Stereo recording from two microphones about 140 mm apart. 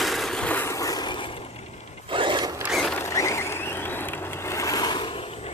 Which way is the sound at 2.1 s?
35° right (ahead or behind).